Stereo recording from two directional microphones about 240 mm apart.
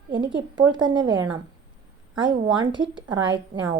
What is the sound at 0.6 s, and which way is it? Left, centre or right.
A woman's voice, centre.